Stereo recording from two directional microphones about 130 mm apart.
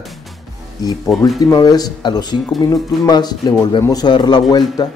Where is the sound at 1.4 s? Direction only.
30° left (ahead or behind).